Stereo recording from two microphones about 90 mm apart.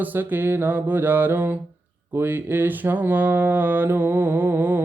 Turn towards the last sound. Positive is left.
turn(degrees=-20)  # may be behind; listen again after turning